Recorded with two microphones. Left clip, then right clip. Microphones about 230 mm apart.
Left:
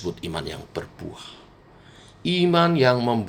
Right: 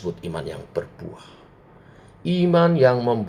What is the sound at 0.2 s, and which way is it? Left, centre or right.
Speech, left.